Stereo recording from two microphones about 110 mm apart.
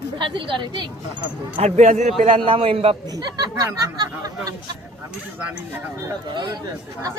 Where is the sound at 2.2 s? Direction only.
60° right (ahead or behind).